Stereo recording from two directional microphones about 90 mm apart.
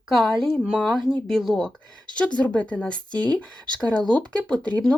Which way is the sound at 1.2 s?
5° left (ahead or behind).